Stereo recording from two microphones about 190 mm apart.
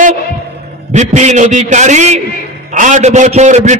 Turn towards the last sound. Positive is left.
turn(degrees=-40)  # may be behind; listen again after turning